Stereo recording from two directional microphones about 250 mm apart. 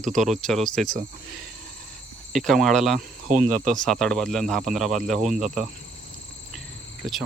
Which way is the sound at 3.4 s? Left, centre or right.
Right.